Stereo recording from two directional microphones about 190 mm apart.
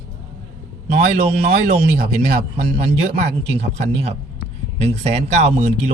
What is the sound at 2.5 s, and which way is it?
Speech, 30° right (ahead or behind).